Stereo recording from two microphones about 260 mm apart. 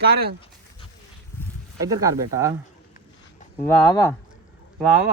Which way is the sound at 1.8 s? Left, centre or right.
Centre.